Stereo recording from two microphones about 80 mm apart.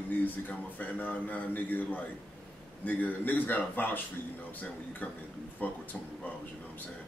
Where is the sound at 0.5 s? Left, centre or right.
Left.